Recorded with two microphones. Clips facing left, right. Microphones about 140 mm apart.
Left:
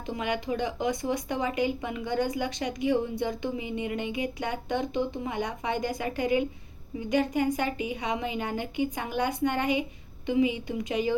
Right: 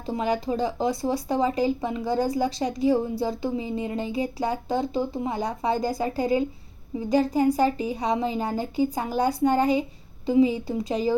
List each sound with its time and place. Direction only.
0.0 s speech: 35° right (ahead or behind)